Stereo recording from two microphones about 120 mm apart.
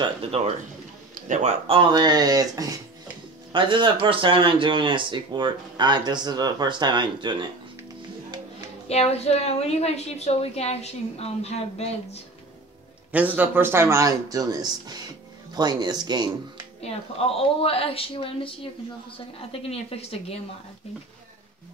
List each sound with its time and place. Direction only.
0.0 s speech: 55° right (ahead or behind)
1.2 s speech: 80° right
1.7 s speech: 40° right (ahead or behind)
3.5 s speech: 45° right (ahead or behind)
8.5 s a woman's voice: 65° left (ahead or behind)
13.1 s speech: 15° right (ahead or behind); by 16.3 s 35° right (ahead or behind)
16.8 s a woman's voice: 55° left (ahead or behind)